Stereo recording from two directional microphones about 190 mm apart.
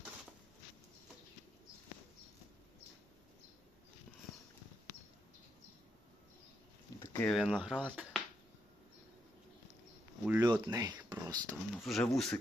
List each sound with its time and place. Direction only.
7.0 s a sound: 15° left (ahead or behind)
7.3 s speech: centre (ahead or behind)
10.2 s speech: 10° right (ahead or behind)
11.7 s speech: centre (ahead or behind)